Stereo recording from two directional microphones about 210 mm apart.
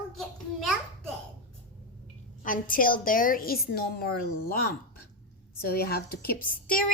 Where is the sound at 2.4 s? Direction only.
40° left (ahead or behind).